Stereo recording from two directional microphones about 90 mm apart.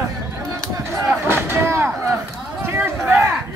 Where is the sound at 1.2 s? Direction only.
25° right (ahead or behind).